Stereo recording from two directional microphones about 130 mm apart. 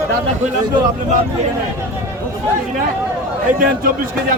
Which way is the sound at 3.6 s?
90° right.